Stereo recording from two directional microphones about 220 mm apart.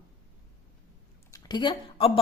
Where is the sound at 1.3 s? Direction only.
20° left (ahead or behind).